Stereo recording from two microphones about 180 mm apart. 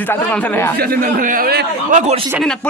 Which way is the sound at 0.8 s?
55° right (ahead or behind).